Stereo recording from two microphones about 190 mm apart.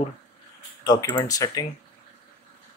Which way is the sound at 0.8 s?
20° left (ahead or behind).